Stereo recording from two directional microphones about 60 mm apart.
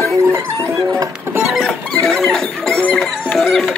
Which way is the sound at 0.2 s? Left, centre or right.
Right.